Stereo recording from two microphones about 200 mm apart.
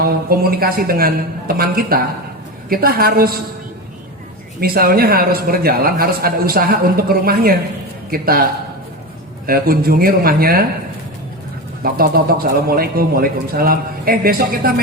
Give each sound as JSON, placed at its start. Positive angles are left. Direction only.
{"t": 0.0, "sound": "a man's voice", "side_deg": -50}
{"t": 4.6, "sound": "a man's voice", "side_deg": -50}
{"t": 9.5, "sound": "a man's voice", "side_deg": -50}
{"t": 11.8, "sound": "a man's voice", "side_deg": -45}